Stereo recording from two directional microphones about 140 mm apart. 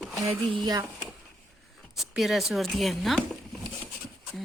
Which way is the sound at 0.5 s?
30° right (ahead or behind).